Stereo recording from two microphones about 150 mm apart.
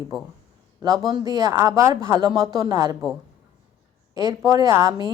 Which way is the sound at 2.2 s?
30° right (ahead or behind).